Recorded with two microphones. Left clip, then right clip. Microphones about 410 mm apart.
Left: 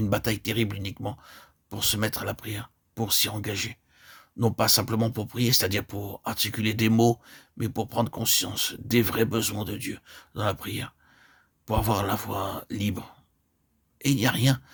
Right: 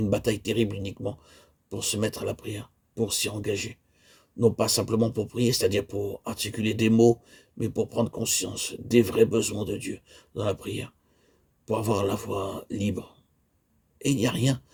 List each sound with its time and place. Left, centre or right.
0.0 s speech: left